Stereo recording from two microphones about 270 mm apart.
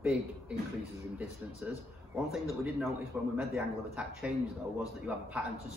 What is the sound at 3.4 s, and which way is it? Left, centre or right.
A man's voice, centre.